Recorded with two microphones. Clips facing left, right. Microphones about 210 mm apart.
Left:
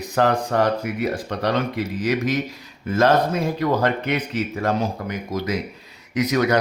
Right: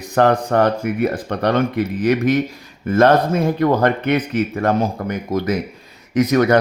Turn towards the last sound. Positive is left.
turn(degrees=-50)  # may be behind; listen again after turning